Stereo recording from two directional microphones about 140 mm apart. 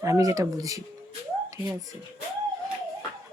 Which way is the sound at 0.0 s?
20° right (ahead or behind).